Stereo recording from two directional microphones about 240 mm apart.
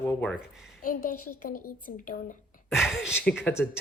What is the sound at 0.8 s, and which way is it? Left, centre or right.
Speech, left.